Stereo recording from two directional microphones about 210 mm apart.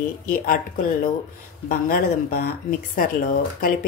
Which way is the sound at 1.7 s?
45° left (ahead or behind).